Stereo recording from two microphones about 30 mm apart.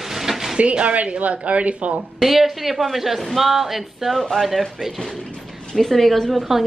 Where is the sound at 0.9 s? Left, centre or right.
Right.